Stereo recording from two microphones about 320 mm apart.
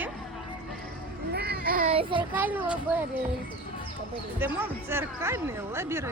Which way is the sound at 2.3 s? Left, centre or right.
Centre.